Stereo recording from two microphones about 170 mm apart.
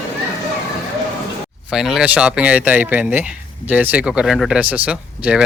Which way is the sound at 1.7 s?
5° right (ahead or behind).